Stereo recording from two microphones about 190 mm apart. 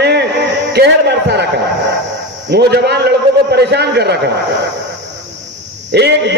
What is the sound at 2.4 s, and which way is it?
A man's voice, 60° right (ahead or behind).